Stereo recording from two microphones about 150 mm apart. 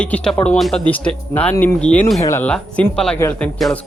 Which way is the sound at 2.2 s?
20° left (ahead or behind).